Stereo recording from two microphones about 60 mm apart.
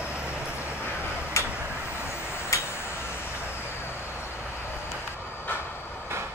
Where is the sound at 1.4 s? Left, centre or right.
Left.